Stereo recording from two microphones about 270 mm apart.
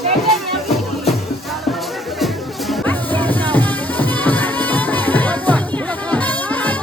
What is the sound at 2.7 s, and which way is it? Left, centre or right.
Music, centre.